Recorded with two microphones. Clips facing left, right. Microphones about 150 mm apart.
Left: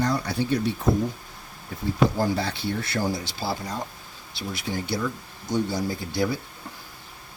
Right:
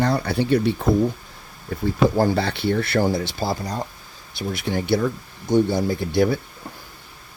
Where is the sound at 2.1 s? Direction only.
70° right (ahead or behind).